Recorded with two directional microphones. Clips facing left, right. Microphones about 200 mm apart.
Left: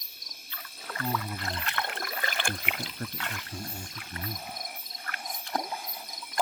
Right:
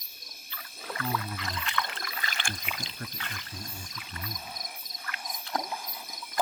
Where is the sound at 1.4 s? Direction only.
55° left (ahead or behind).